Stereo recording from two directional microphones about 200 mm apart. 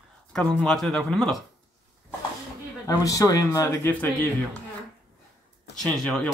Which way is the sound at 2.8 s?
15° left (ahead or behind).